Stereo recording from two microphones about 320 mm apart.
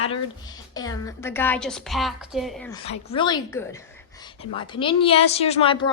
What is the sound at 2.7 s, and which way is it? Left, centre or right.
A woman's voice, centre.